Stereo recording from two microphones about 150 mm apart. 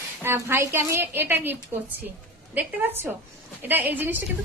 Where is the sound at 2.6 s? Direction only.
15° right (ahead or behind).